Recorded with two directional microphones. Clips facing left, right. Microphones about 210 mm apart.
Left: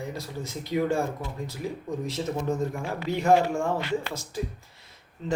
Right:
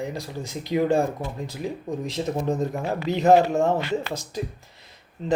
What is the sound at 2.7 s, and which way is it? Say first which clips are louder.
Speech: right 5 dB; 40° right (ahead or behind).